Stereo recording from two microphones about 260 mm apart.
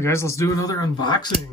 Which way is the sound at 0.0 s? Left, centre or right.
Centre.